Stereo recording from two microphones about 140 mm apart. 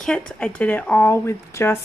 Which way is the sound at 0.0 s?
5° left (ahead or behind).